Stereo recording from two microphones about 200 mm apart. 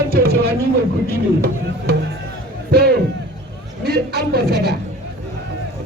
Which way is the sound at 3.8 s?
50° right (ahead or behind).